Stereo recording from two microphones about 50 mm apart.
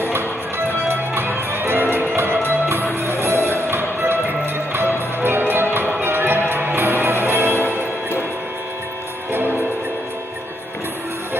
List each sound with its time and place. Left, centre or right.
0.0 s music: right
3.0 s music: right